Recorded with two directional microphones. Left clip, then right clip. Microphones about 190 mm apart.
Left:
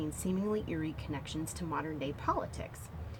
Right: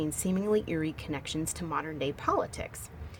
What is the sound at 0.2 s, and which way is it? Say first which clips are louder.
Speech: right 7 dB; 55° right (ahead or behind).